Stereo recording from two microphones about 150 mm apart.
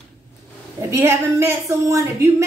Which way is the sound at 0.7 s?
20° right (ahead or behind).